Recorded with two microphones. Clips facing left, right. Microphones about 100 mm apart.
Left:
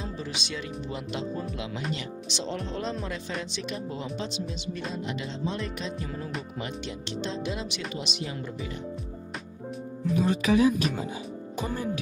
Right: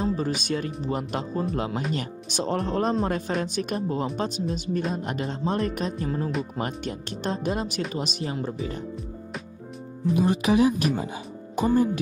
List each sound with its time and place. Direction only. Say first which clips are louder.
0.0 s speech: right 9 dB; 45° right (ahead or behind)
10.1 s speech: right 2 dB; 55° right (ahead or behind)
11.6 s speech: right 11 dB; 35° right (ahead or behind)